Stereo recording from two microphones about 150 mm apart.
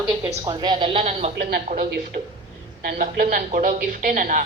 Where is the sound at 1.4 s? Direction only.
90° right.